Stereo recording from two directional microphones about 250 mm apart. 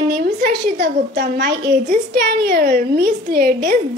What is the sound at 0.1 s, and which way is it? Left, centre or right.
A woman's voice, right.